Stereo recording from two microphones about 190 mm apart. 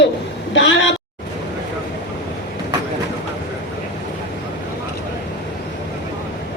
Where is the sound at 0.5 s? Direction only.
75° left (ahead or behind).